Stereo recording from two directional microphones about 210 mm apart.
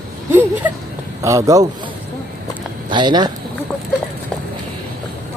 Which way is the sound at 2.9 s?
20° right (ahead or behind).